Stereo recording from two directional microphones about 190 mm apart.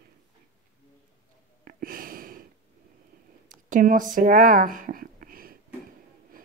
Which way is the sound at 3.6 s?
45° right (ahead or behind).